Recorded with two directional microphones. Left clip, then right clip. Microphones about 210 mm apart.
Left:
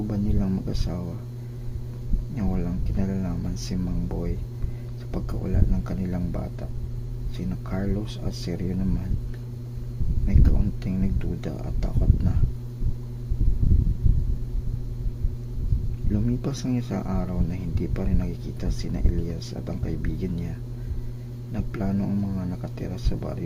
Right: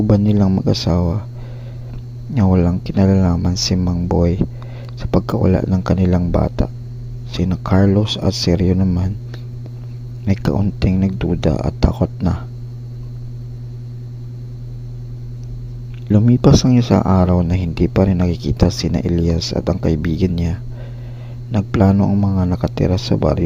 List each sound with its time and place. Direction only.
0.1 s speech: 35° right (ahead or behind)
2.3 s speech: 35° right (ahead or behind)
10.2 s speech: 35° right (ahead or behind)
16.3 s speech: 35° right (ahead or behind)
22.0 s speech: 20° right (ahead or behind)
22.6 s speech: 30° right (ahead or behind)